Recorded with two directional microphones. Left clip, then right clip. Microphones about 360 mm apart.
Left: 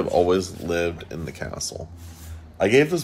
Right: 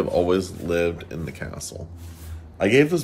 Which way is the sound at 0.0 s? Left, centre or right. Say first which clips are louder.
Left 1 dB; centre.